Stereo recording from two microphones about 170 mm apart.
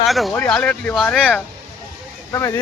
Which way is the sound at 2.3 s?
15° left (ahead or behind).